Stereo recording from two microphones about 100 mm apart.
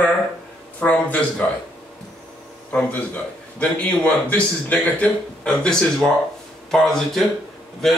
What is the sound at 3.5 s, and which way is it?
A man's voice, 15° left (ahead or behind).